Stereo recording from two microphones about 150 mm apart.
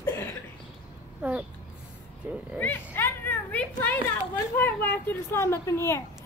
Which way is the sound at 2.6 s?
15° left (ahead or behind).